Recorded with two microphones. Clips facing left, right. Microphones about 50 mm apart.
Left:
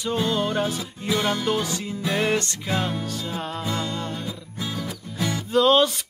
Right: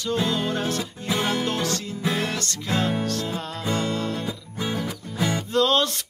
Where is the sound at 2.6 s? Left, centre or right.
Centre.